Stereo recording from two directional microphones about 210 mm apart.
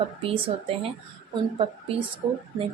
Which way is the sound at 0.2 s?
25° right (ahead or behind).